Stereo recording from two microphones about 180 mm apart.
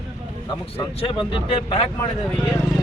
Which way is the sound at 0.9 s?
30° left (ahead or behind).